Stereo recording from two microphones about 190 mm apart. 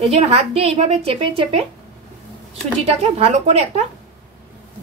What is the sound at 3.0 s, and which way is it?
Speech, 35° right (ahead or behind).